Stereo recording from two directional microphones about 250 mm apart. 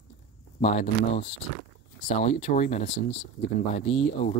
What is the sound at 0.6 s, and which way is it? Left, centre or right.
Speech, left.